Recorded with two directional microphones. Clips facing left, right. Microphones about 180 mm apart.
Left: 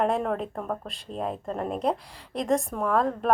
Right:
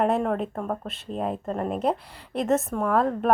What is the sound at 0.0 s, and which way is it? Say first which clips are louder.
Speech: right 2 dB; centre (ahead or behind).